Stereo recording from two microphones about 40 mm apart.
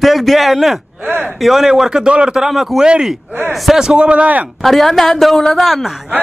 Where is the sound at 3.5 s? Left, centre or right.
Centre.